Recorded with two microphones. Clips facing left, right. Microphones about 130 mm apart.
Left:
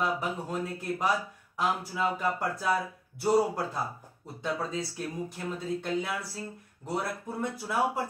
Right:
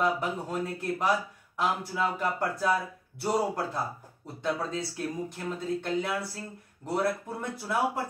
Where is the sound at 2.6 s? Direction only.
Centre (ahead or behind).